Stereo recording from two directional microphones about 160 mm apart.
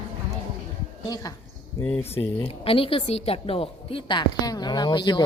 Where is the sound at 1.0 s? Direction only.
25° left (ahead or behind).